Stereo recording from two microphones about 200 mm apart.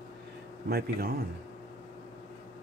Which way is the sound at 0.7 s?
50° right (ahead or behind).